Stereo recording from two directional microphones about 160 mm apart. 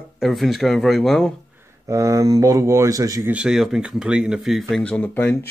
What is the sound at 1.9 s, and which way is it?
Speech, 20° right (ahead or behind).